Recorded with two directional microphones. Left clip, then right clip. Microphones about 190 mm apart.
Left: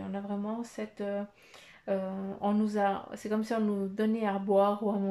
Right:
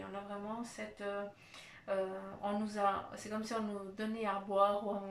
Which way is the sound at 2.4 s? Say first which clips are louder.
Left 7 dB; 40° left (ahead or behind).